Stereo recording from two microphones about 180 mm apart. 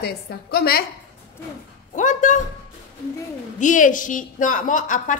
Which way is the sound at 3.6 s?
45° left (ahead or behind).